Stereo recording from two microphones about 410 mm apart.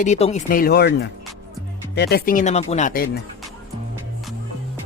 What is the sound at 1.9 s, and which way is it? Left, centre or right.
Speech, left.